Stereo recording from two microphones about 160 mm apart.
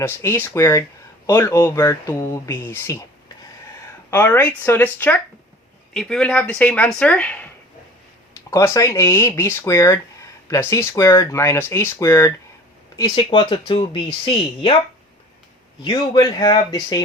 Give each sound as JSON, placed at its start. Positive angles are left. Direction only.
{"t": 0.0, "sound": "speech", "side_deg": 15}
{"t": 4.1, "sound": "speech", "side_deg": 15}
{"t": 8.4, "sound": "speech", "side_deg": 20}
{"t": 13.1, "sound": "speech", "side_deg": 35}
{"t": 15.8, "sound": "speech", "side_deg": 30}